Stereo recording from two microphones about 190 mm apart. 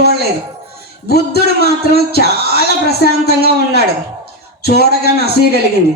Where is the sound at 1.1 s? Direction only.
55° left (ahead or behind).